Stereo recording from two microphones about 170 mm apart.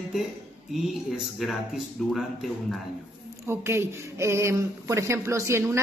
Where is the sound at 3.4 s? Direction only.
15° right (ahead or behind).